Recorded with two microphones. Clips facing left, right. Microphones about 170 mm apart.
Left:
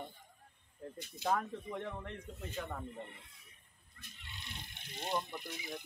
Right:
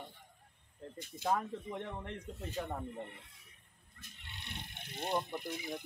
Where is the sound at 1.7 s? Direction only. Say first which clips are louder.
Even; 20° right (ahead or behind).